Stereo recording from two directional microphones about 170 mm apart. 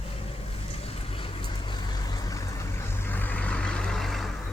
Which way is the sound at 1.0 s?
30° left (ahead or behind).